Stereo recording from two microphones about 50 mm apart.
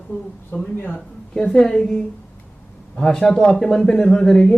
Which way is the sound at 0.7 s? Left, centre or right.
Left.